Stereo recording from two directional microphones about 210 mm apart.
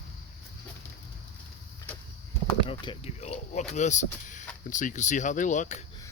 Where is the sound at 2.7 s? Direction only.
25° left (ahead or behind).